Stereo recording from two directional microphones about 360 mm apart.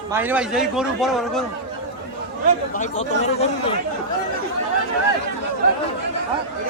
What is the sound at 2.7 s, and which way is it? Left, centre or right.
Speech, centre.